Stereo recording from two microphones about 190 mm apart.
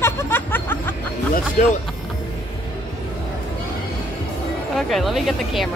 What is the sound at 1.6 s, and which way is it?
Speech, 40° left (ahead or behind).